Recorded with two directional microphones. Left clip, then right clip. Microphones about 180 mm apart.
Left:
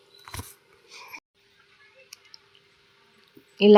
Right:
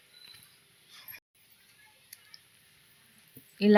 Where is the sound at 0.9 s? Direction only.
5° left (ahead or behind).